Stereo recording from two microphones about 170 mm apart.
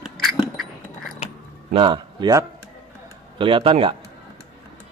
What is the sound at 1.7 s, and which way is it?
A man's voice, 30° right (ahead or behind).